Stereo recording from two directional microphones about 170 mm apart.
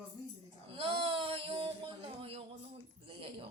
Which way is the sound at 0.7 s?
30° right (ahead or behind).